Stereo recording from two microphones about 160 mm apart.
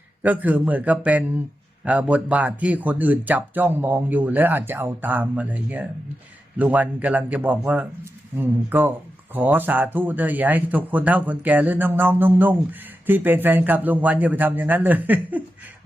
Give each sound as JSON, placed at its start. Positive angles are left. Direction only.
{"t": 0.2, "sound": "a man's voice", "side_deg": -10}